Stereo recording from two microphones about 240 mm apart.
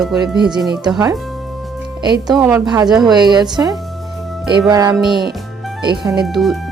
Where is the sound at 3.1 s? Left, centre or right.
Centre.